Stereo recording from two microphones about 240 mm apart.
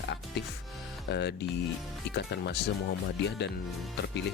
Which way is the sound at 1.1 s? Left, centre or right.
Left.